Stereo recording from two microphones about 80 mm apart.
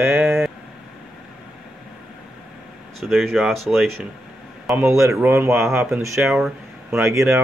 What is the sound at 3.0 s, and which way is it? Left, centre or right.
Speech, centre.